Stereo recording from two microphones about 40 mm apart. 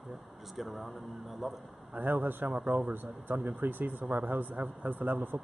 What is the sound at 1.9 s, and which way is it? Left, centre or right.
A man's voice, right.